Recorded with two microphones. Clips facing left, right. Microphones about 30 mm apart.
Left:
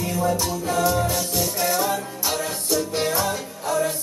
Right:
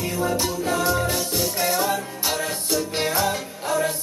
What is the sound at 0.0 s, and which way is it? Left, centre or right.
Music, centre.